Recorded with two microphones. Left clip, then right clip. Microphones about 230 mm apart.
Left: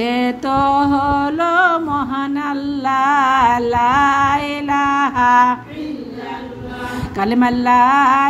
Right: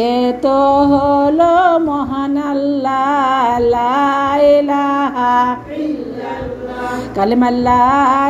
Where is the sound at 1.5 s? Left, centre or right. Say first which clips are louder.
Right 3 dB; left.